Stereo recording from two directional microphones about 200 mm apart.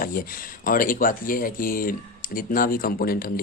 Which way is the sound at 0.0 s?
45° left (ahead or behind).